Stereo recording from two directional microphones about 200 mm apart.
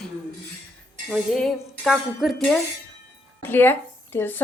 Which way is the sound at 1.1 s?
Centre (ahead or behind).